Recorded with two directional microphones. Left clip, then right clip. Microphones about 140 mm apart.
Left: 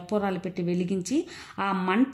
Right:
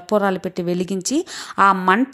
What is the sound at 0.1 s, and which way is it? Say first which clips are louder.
A woman's voice: right 10 dB; 40° right (ahead or behind).